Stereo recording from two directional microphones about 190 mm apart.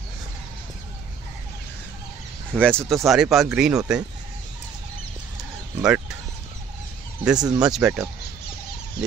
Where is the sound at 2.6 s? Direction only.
5° left (ahead or behind).